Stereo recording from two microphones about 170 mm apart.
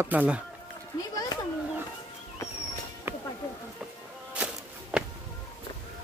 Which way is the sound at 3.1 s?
15° right (ahead or behind).